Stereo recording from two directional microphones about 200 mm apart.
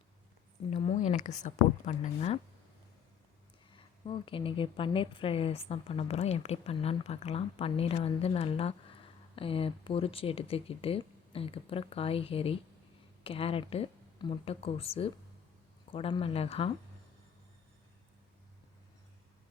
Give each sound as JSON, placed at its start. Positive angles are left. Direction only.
{"t": 0.7, "sound": "speech", "side_deg": 35}
{"t": 3.7, "sound": "a woman's voice", "side_deg": 25}